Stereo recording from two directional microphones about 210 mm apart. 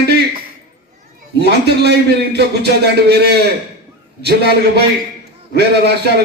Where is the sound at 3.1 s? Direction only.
50° right (ahead or behind).